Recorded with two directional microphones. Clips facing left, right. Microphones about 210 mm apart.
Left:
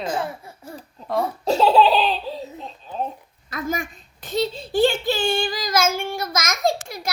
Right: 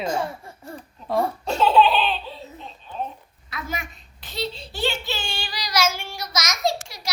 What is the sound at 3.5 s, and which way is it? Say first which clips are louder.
A child's voice: left 6 dB; 50° left (ahead or behind).